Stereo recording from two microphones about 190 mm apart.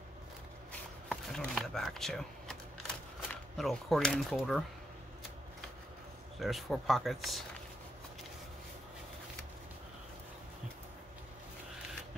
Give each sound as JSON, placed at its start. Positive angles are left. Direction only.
{"t": 1.0, "sound": "a sound", "side_deg": 0}
{"t": 3.5, "sound": "speech", "side_deg": 0}
{"t": 6.4, "sound": "speech", "side_deg": 0}